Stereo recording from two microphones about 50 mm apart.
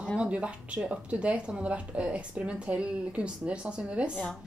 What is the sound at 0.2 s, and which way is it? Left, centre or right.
Speech, right.